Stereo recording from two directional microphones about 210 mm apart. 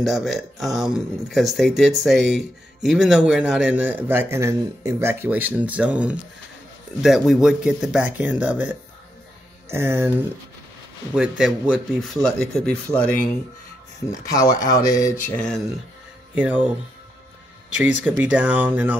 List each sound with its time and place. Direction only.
0.0 s speech: centre (ahead or behind)
14.0 s speech: 15° left (ahead or behind)
16.3 s speech: 5° right (ahead or behind)
17.7 s speech: 5° right (ahead or behind)